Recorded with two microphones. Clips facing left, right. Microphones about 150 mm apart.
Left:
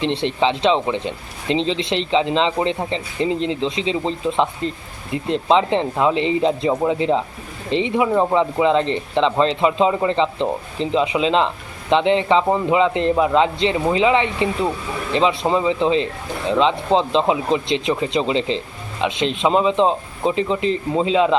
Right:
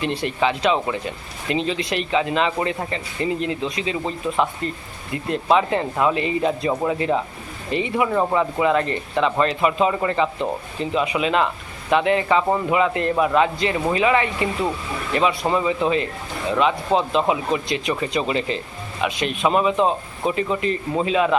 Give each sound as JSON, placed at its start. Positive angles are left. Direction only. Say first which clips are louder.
{"t": 0.0, "sound": "speech", "louder": "left 3 dB", "side_deg": 25}